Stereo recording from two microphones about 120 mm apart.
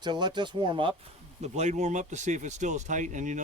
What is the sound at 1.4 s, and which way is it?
Speech, 70° right (ahead or behind).